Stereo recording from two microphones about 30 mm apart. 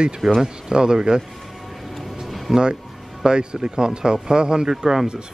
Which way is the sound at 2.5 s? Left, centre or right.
Right.